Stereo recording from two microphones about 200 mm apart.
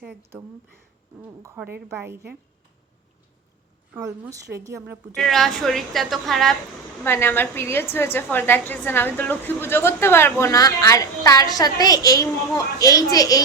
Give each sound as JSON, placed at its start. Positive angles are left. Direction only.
{"t": 1.2, "sound": "a woman's voice", "side_deg": -10}
{"t": 3.9, "sound": "a woman's voice", "side_deg": -10}
{"t": 5.1, "sound": "a woman's voice", "side_deg": 0}